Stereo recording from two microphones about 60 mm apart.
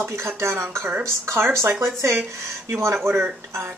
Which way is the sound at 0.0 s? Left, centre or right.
Right.